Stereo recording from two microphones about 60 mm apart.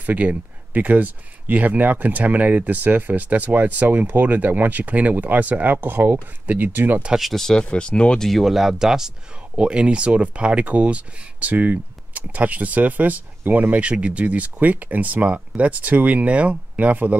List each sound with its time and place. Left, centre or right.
0.0 s speech: right
7.2 s speech: centre
7.4 s speech: centre
8.3 s speech: centre; by 17.2 s right